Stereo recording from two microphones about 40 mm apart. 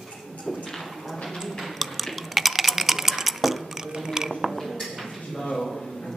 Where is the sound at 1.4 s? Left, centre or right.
Centre.